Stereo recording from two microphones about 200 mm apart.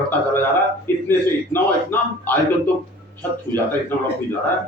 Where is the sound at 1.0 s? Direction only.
10° left (ahead or behind).